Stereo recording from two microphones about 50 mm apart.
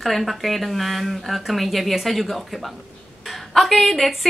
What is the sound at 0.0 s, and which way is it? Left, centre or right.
A woman's voice, centre.